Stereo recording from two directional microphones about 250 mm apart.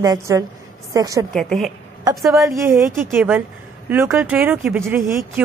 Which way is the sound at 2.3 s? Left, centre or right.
Centre.